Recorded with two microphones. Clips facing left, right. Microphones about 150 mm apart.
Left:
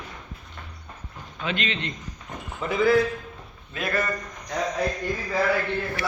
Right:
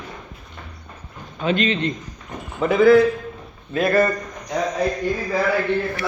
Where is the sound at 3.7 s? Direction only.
35° right (ahead or behind).